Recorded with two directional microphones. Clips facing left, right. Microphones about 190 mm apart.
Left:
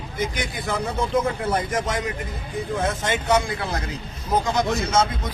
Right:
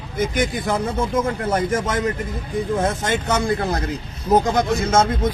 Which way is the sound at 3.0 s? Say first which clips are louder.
Right 1 dB; 45° right (ahead or behind).